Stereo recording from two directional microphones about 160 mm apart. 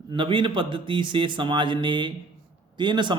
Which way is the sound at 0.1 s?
30° right (ahead or behind).